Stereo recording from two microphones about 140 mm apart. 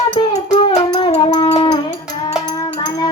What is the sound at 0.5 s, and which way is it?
Wind instrument, 40° left (ahead or behind).